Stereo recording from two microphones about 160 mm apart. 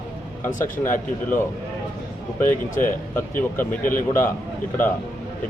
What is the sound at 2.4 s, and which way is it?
Speech, 55° left (ahead or behind).